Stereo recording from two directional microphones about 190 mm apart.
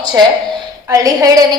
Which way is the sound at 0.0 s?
20° right (ahead or behind).